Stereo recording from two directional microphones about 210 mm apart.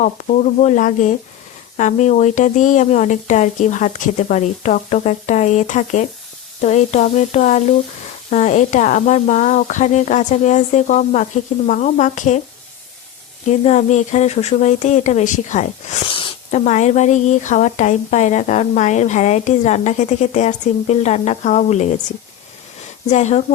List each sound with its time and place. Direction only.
0.0 s speech: 35° left (ahead or behind)
13.7 s speech: 35° left (ahead or behind)
23.0 s speech: 35° left (ahead or behind)